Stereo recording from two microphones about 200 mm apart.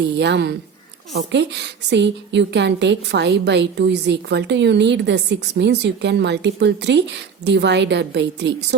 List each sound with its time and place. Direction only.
0.2 s a woman's voice: 60° right (ahead or behind)